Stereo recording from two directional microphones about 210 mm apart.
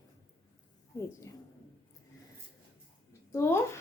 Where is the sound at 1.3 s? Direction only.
15° left (ahead or behind).